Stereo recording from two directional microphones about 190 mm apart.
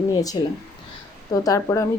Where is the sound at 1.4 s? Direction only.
15° left (ahead or behind).